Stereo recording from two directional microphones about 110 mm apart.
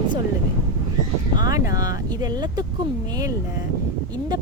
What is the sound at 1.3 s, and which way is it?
Speech, 35° right (ahead or behind).